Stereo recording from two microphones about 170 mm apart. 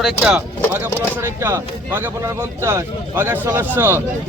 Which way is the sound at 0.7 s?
15° right (ahead or behind).